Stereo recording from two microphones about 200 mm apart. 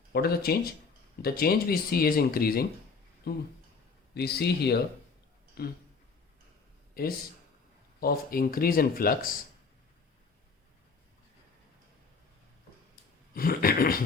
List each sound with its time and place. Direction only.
0.1 s speech: 50° left (ahead or behind)
6.9 s speech: 50° left (ahead or behind)
13.3 s speech: 45° left (ahead or behind)